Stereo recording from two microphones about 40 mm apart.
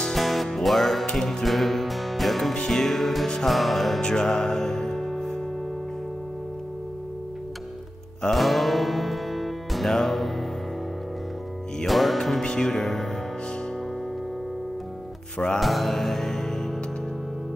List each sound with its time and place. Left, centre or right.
0.0 s music: centre
1.1 s speech: centre
1.4 s music: centre
4.0 s music: centre
8.3 s music: centre
11.8 s music: centre
12.4 s speech: centre
12.8 s speech: centre
15.3 s music: centre
15.6 s music: centre